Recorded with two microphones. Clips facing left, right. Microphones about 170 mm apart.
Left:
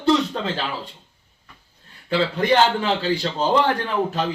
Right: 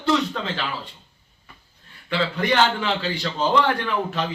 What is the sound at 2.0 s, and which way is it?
A man's voice, 35° left (ahead or behind).